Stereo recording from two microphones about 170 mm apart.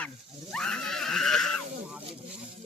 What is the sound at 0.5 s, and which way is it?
Screaming, 5° left (ahead or behind).